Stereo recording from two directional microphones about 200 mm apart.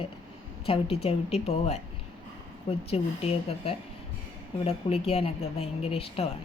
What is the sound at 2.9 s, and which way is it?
A woman's voice, 30° left (ahead or behind).